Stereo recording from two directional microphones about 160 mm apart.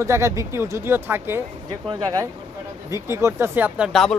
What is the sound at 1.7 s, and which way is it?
Speech, 30° right (ahead or behind).